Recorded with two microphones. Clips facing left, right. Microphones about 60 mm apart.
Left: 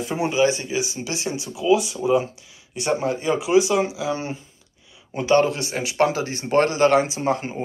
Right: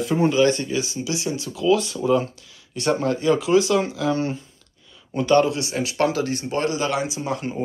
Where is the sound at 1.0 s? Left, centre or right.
Left.